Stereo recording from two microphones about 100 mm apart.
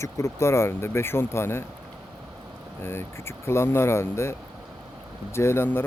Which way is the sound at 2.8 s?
25° left (ahead or behind).